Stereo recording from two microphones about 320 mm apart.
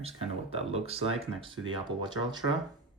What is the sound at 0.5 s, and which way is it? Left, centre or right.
Speech, centre.